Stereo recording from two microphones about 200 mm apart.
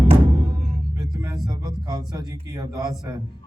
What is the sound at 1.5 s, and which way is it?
A man's voice, 20° right (ahead or behind).